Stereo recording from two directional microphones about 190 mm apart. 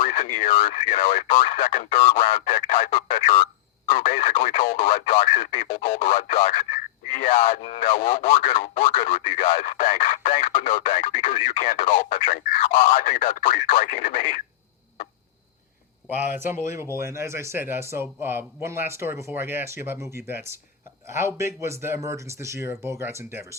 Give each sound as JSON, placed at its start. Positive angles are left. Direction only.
{"t": 0.0, "sound": "speech", "side_deg": 40}
{"t": 3.8, "sound": "speech", "side_deg": 45}
{"t": 4.1, "sound": "speech", "side_deg": 30}
{"t": 4.6, "sound": "speech", "side_deg": 45}
{"t": 4.9, "sound": "speech", "side_deg": 30}
{"t": 5.7, "sound": "speech", "side_deg": 45}
{"t": 7.4, "sound": "speech", "side_deg": 30}
{"t": 7.9, "sound": "speech", "side_deg": 50}
{"t": 16.0, "sound": "speech", "side_deg": -10}